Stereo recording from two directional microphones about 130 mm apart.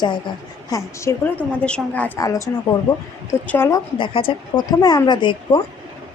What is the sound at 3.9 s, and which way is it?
Speech, 40° left (ahead or behind).